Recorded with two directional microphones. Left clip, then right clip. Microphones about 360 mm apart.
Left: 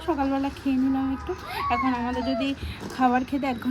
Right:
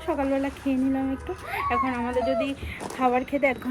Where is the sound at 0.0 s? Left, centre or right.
Centre.